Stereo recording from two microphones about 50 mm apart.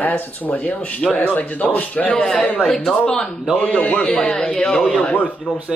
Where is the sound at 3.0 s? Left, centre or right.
Centre.